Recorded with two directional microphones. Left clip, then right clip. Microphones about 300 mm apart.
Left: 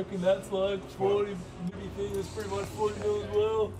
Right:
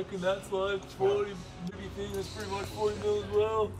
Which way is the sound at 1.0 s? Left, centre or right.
Right.